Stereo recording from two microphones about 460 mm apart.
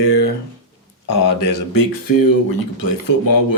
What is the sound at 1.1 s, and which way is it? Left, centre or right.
Speech, left.